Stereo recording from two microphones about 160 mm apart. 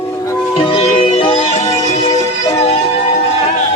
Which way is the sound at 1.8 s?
45° left (ahead or behind).